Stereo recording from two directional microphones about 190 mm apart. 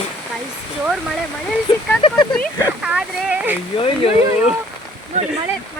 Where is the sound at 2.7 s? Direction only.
5° right (ahead or behind).